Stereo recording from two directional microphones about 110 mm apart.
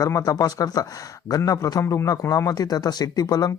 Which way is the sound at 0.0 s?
35° left (ahead or behind).